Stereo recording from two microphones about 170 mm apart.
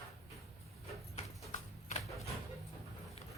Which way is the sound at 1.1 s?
45° left (ahead or behind).